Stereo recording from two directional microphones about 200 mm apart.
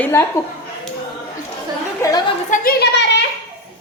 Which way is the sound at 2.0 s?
20° left (ahead or behind).